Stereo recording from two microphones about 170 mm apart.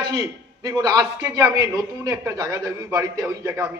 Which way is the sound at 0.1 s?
20° right (ahead or behind).